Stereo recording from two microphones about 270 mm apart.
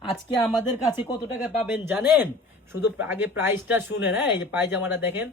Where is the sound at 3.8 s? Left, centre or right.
Left.